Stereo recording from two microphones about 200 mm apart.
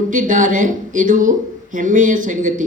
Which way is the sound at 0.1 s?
40° right (ahead or behind).